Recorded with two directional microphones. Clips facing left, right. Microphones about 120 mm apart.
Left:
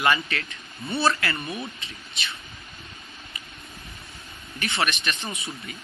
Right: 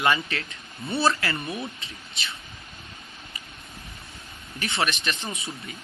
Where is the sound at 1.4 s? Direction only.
Centre (ahead or behind).